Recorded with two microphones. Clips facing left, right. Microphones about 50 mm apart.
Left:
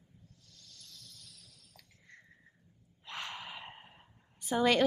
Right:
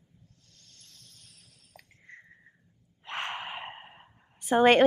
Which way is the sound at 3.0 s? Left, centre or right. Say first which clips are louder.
Right 7 dB; right.